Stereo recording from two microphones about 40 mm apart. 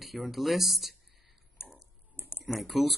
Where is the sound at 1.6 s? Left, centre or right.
Left.